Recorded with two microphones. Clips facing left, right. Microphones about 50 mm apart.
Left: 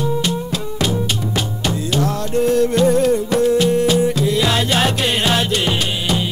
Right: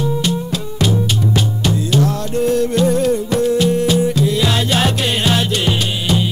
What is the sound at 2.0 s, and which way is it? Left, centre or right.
Music, left.